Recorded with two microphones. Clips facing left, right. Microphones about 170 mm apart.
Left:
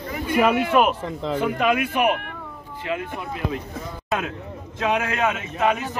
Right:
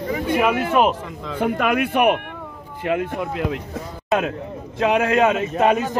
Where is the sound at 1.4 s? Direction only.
60° right (ahead or behind).